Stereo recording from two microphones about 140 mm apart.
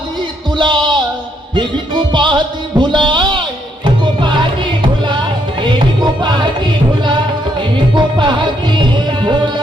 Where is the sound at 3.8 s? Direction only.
35° right (ahead or behind).